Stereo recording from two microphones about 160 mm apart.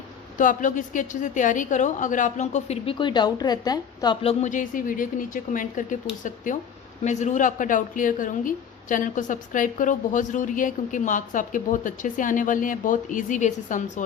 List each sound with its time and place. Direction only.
0.3 s a woman's voice: 55° left (ahead or behind)
3.0 s a woman's voice: 30° left (ahead or behind); by 14.0 s 50° left (ahead or behind)